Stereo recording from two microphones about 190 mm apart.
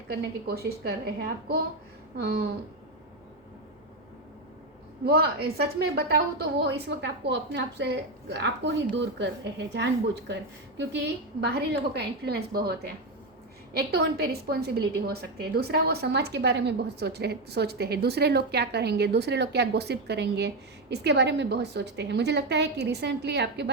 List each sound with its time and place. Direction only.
0.1 s a woman's voice: 55° right (ahead or behind)
5.0 s a woman's voice: 55° right (ahead or behind)